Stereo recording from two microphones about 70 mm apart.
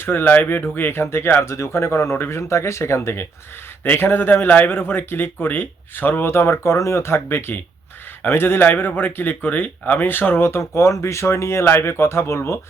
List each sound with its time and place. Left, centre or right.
0.0 s speech: left